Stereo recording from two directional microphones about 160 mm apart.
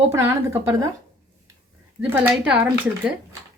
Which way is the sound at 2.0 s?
10° right (ahead or behind).